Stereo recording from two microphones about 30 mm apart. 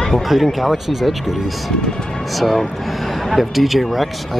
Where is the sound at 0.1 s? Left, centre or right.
Centre.